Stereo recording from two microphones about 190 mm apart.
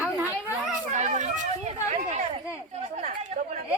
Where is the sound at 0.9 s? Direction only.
40° right (ahead or behind).